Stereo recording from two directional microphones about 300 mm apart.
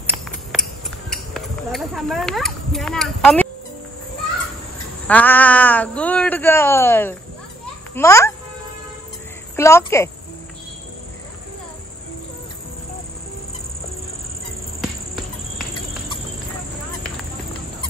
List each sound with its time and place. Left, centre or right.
1.1 s speech: centre
5.0 s a child's voice: centre
9.6 s speech: centre
14.8 s cricket: centre